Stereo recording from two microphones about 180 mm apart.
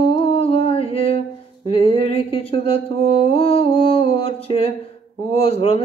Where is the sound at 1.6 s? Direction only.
30° left (ahead or behind).